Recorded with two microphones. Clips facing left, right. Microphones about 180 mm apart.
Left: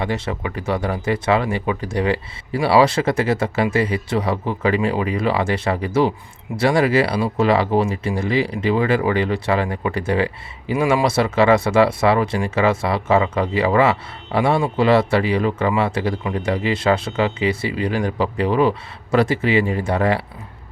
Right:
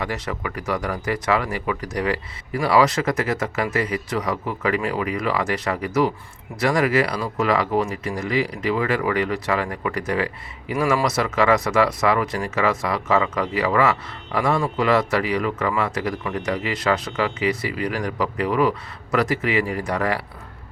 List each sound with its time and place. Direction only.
0.0 s speech: 25° left (ahead or behind)